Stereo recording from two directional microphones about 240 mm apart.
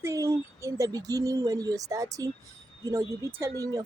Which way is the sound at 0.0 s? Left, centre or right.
Centre.